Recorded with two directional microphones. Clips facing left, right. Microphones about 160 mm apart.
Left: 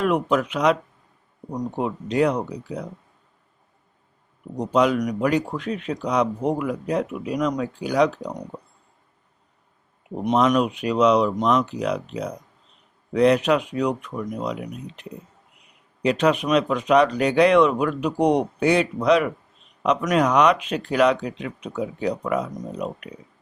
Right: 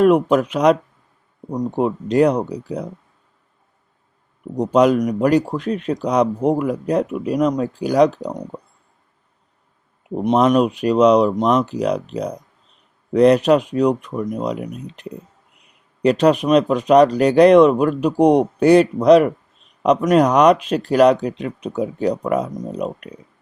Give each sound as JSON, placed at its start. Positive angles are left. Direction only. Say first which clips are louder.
{"t": 0.0, "sound": "speech", "louder": "right 7 dB", "side_deg": -45}
{"t": 1.5, "sound": "speech", "louder": "right 5 dB", "side_deg": -30}
{"t": 1.8, "sound": "speech", "louder": "right 6 dB", "side_deg": -45}
{"t": 4.5, "sound": "speech", "louder": "right 5 dB", "side_deg": -45}
{"t": 10.2, "sound": "speech", "louder": "right 4 dB", "side_deg": -35}
{"t": 16.0, "sound": "speech", "louder": "right 5 dB", "side_deg": -40}